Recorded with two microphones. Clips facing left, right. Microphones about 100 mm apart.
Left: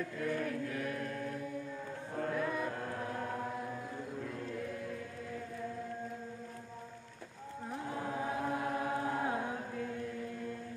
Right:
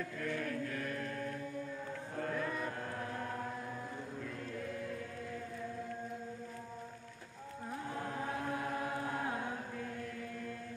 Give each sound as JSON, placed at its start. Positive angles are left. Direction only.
{"t": 0.3, "sound": "music", "side_deg": 10}
{"t": 2.3, "sound": "music", "side_deg": 10}
{"t": 8.1, "sound": "chant", "side_deg": 15}